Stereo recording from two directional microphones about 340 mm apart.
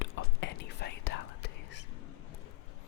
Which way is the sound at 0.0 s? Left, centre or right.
Left.